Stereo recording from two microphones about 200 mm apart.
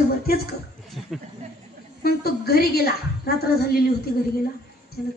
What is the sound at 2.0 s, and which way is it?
Speech, 50° left (ahead or behind).